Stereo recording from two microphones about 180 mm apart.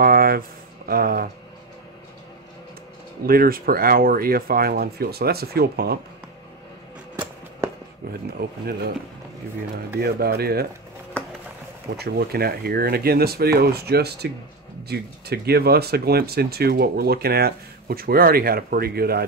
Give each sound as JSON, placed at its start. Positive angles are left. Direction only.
{"t": 0.0, "sound": "a sound", "side_deg": -55}
{"t": 0.8, "sound": "speech", "side_deg": -55}
{"t": 3.3, "sound": "speech", "side_deg": -55}
{"t": 8.4, "sound": "speech", "side_deg": -55}
{"t": 9.9, "sound": "speech", "side_deg": -60}
{"t": 12.0, "sound": "speech", "side_deg": -60}